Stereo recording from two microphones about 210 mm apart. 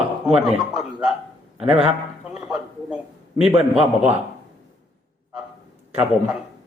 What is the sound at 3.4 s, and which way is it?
Speech, 25° right (ahead or behind).